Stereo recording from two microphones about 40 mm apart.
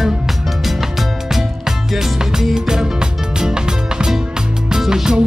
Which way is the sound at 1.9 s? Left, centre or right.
Centre.